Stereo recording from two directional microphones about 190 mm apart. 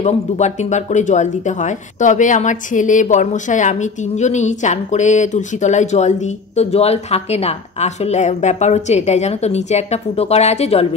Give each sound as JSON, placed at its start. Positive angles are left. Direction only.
{"t": 0.0, "sound": "speech", "side_deg": 40}